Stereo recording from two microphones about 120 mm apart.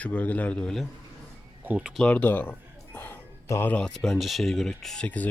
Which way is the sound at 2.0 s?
10° left (ahead or behind).